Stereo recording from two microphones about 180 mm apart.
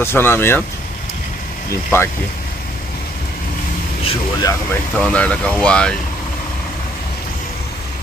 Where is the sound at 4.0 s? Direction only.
20° left (ahead or behind).